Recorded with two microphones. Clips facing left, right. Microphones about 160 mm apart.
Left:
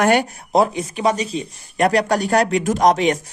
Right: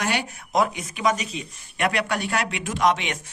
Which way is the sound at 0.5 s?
30° left (ahead or behind).